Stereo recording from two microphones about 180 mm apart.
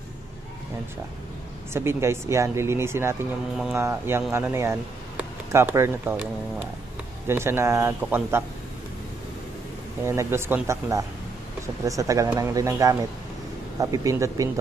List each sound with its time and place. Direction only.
1.7 s speech: 15° right (ahead or behind)
7.2 s speech: 15° right (ahead or behind)
10.0 s speech: 15° right (ahead or behind)